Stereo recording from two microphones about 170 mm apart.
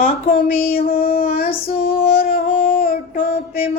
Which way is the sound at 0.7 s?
60° left (ahead or behind).